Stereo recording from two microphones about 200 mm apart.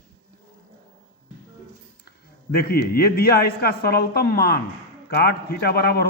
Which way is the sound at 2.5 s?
50° left (ahead or behind).